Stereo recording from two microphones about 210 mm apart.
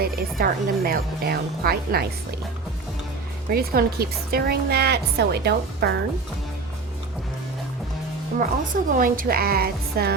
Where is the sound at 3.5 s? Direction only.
45° right (ahead or behind).